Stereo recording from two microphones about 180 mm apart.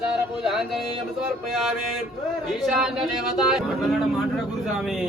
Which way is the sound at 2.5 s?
Centre (ahead or behind).